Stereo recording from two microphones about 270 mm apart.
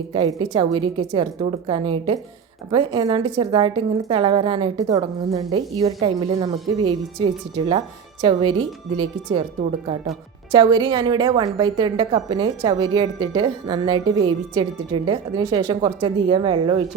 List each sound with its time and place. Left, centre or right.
0.1 s a woman's voice: centre
8.2 s a woman's voice: centre
10.5 s a woman's voice: centre